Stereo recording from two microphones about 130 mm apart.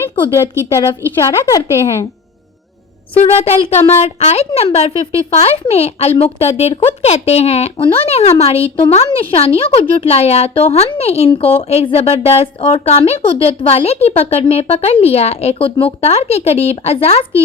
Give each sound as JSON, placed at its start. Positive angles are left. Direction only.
{"t": 0.3, "sound": "a woman's voice", "side_deg": 20}
{"t": 3.2, "sound": "speech", "side_deg": 50}